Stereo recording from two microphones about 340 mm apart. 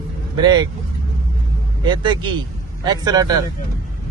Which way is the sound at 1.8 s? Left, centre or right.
Centre.